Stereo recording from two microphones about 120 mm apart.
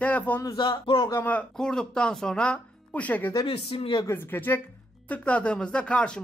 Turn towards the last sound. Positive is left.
turn(degrees=10)  # may be behind; listen again after turning